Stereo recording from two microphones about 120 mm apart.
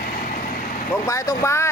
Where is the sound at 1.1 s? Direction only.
25° left (ahead or behind).